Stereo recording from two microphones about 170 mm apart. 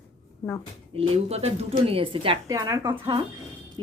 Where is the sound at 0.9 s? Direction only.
35° right (ahead or behind).